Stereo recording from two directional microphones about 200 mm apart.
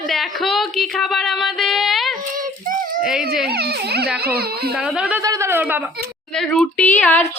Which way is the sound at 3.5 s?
55° right (ahead or behind).